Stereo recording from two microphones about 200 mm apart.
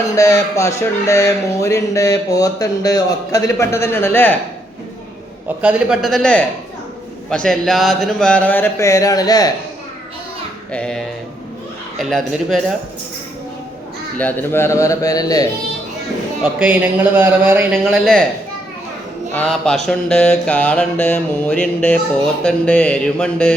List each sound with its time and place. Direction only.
0.2 s speech: 15° left (ahead or behind)
5.6 s speech: centre (ahead or behind); by 9.5 s 20° left (ahead or behind)
10.7 s speech: 5° left (ahead or behind)
14.2 s speech: 10° left (ahead or behind)
16.4 s speech: 5° right (ahead or behind)
19.3 s speech: 5° left (ahead or behind)